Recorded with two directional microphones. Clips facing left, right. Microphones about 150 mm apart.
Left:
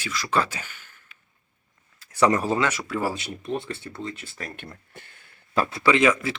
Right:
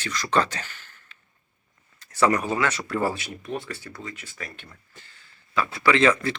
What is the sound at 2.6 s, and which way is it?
Speech, 5° left (ahead or behind).